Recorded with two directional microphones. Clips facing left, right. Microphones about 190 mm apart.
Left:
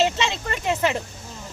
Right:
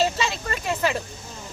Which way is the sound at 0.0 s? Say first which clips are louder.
Left 1 dB; 25° left (ahead or behind).